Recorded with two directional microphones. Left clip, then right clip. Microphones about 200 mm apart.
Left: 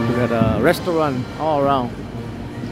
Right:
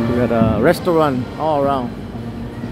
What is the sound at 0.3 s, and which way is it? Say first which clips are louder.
Speech: right 2 dB; 5° right (ahead or behind).